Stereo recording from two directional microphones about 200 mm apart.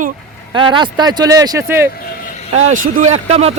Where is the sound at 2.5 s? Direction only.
35° right (ahead or behind).